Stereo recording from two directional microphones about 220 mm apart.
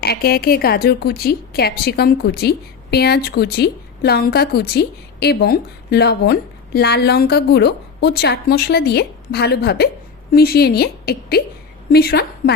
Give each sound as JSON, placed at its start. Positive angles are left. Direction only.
{"t": 0.0, "sound": "a woman's voice", "side_deg": 45}